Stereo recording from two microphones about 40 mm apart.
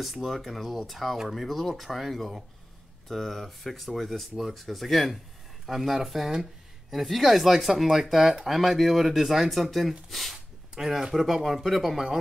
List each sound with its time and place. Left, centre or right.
0.0 s speech: centre
5.7 s speech: centre